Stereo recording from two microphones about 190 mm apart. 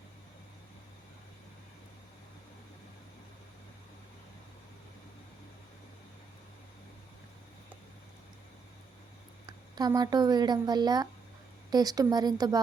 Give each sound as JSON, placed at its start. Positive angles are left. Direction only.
{"t": 9.5, "sound": "speech", "side_deg": -20}